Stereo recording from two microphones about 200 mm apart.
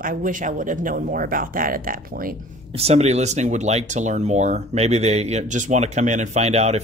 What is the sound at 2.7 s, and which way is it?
Speech, 30° right (ahead or behind).